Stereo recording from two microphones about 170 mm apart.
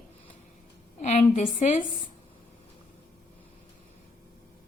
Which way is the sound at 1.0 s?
45° left (ahead or behind).